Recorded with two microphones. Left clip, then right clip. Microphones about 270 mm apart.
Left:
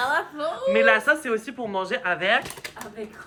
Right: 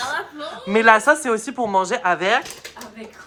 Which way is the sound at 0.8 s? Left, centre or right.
Centre.